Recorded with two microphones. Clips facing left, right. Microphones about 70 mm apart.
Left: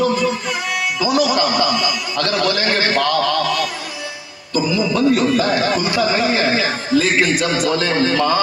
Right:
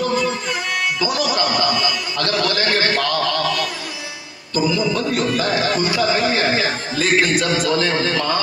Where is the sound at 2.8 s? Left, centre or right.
Left.